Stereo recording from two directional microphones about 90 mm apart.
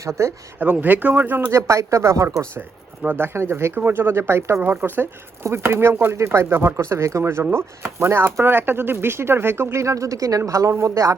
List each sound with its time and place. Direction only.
0.0 s speech: 30° right (ahead or behind)
0.6 s speech: 20° right (ahead or behind)
1.5 s speech: 35° right (ahead or behind)